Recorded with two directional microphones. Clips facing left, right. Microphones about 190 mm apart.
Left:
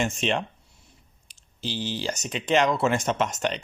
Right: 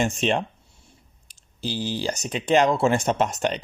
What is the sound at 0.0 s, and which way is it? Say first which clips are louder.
Speech: right 3 dB; 35° right (ahead or behind).